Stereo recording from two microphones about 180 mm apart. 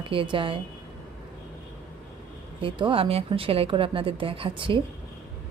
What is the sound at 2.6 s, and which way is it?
Speech, 30° right (ahead or behind).